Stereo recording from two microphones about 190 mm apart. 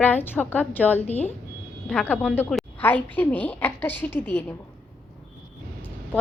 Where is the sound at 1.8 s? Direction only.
5° left (ahead or behind).